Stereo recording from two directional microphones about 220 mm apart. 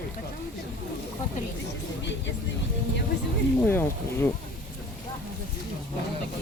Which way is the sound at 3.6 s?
10° left (ahead or behind).